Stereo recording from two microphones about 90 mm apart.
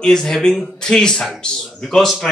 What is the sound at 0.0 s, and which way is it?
Speech, 5° left (ahead or behind).